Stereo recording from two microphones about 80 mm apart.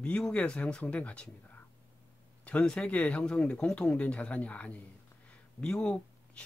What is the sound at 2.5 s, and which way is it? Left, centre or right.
Speech, centre.